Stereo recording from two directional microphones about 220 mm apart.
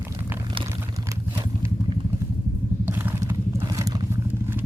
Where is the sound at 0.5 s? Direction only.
20° right (ahead or behind).